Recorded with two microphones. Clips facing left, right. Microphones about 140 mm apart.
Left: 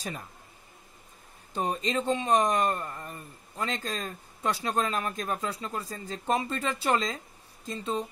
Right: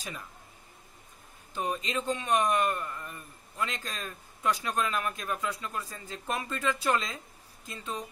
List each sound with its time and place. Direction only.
1.5 s speech: 35° left (ahead or behind)